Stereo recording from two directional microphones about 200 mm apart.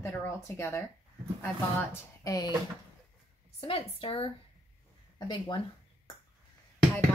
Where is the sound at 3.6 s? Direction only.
30° left (ahead or behind).